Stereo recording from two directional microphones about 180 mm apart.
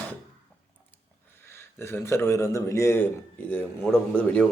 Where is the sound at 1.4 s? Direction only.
15° left (ahead or behind).